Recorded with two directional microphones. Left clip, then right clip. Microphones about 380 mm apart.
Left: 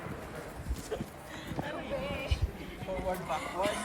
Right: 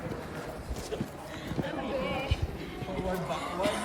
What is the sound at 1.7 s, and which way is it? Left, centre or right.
Chatter, centre.